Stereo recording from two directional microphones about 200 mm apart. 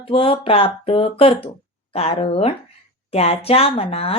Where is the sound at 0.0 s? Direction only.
25° left (ahead or behind).